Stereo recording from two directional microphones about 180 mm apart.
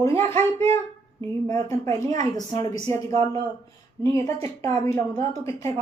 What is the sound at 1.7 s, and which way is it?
Speech, 15° left (ahead or behind).